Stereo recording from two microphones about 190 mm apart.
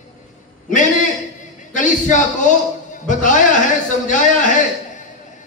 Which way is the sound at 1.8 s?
40° left (ahead or behind).